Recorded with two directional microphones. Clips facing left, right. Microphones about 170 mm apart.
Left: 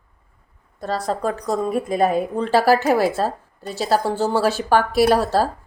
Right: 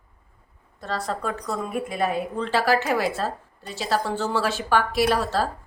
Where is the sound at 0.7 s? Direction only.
40° left (ahead or behind).